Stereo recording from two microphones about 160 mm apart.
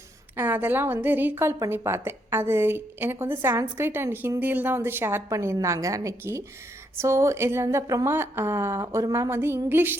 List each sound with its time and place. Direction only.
0.3 s a woman's voice: 10° right (ahead or behind)